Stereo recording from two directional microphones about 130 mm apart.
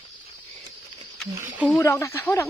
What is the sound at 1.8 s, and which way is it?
Speech, 20° left (ahead or behind).